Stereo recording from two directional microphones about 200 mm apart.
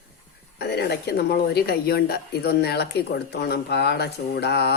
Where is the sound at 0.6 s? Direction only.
55° left (ahead or behind).